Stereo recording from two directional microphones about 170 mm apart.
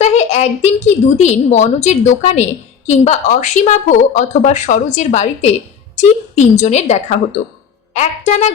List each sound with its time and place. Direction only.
0.0 s a woman's voice: 40° left (ahead or behind)